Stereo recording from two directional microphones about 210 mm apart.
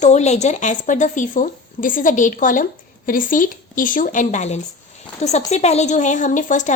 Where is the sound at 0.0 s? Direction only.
35° left (ahead or behind).